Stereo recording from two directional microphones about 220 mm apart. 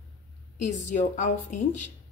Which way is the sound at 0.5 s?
35° left (ahead or behind).